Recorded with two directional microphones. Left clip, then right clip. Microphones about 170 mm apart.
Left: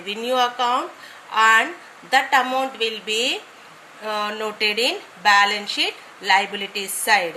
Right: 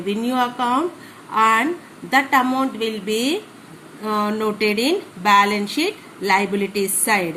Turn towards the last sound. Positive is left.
turn(degrees=30)  # may be behind; listen again after turning